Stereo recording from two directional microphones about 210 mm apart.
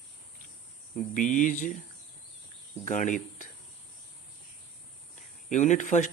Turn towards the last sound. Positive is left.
turn(degrees=35)  # may be behind; listen again after turning